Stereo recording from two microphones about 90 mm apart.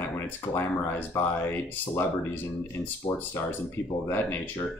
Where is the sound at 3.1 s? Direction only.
45° left (ahead or behind).